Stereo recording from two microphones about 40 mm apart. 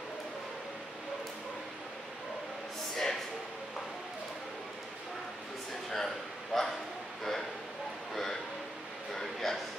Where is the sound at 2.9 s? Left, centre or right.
Centre.